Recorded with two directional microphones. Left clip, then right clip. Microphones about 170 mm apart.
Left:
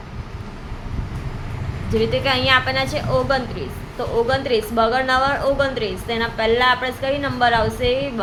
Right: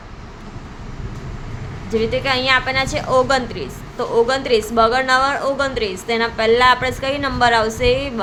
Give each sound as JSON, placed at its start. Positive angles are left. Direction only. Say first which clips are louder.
{"t": 1.9, "sound": "a woman's voice", "louder": "right 1 dB", "side_deg": -5}
{"t": 3.1, "sound": "a woman's voice", "louder": "right 6 dB", "side_deg": -25}